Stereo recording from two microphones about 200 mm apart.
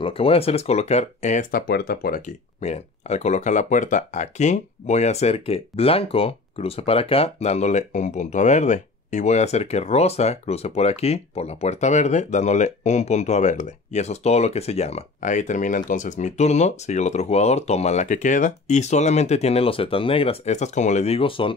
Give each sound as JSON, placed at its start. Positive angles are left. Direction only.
{"t": 0.0, "sound": "speech", "side_deg": 30}